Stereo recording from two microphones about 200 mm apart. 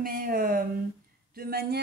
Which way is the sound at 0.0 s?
45° right (ahead or behind).